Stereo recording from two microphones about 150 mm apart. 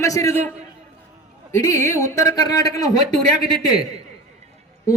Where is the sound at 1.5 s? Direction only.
20° left (ahead or behind).